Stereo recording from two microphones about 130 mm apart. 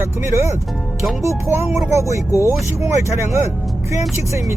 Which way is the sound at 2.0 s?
25° right (ahead or behind).